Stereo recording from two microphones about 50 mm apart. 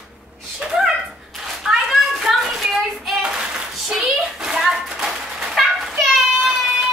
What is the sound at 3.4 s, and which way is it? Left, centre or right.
Clapping, centre.